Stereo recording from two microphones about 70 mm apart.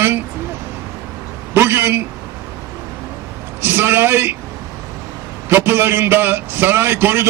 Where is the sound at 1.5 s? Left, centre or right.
Right.